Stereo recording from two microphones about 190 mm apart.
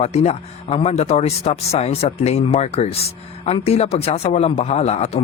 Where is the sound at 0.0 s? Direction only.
35° left (ahead or behind).